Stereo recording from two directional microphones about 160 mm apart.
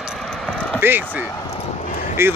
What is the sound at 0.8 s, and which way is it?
Speech, 10° right (ahead or behind).